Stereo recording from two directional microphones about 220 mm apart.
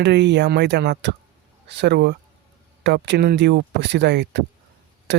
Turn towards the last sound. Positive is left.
turn(degrees=-50)  # may be behind; listen again after turning